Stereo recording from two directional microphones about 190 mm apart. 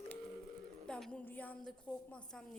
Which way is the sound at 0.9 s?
5° left (ahead or behind).